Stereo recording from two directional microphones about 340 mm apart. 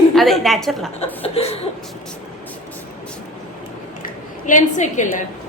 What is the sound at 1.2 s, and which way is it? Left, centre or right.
Chuckle, centre.